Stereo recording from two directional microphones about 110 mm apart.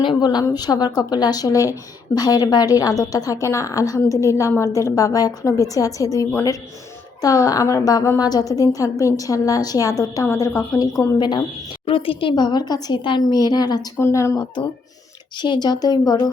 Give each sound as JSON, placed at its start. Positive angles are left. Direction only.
{"t": 0.0, "sound": "a woman's voice", "side_deg": 40}
{"t": 11.2, "sound": "a woman's voice", "side_deg": 40}
{"t": 11.9, "sound": "a woman's voice", "side_deg": 55}
{"t": 12.3, "sound": "a woman's voice", "side_deg": 40}
{"t": 14.0, "sound": "a woman's voice", "side_deg": 25}
{"t": 15.4, "sound": "a woman's voice", "side_deg": 40}